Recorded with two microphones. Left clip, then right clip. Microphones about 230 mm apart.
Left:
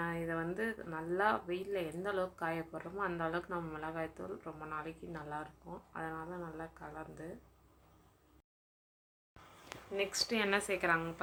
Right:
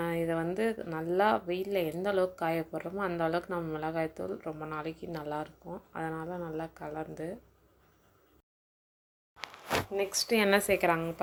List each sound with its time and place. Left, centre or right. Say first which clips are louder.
0.0 s a woman's voice: right 7 dB; right
9.9 s a woman's voice: right 2 dB; centre